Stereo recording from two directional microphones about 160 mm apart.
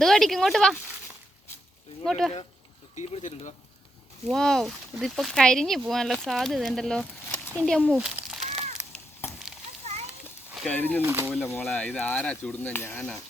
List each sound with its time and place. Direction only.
0.0 s speech: centre (ahead or behind)
2.0 s speech: centre (ahead or behind)
3.1 s speech: 50° left (ahead or behind)
4.3 s speech: 5° left (ahead or behind)
8.0 s a sound: 5° right (ahead or behind)
10.5 s a sound: centre (ahead or behind)
10.8 s speech: 10° left (ahead or behind)
11.0 s speech: 15° right (ahead or behind)
11.6 s speech: 10° left (ahead or behind)